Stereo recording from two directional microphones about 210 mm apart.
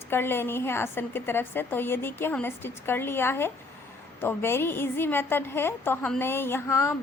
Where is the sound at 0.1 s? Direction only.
10° left (ahead or behind).